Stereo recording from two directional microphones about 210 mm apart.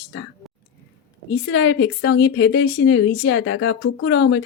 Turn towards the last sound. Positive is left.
turn(degrees=65)  # may be behind; listen again after turning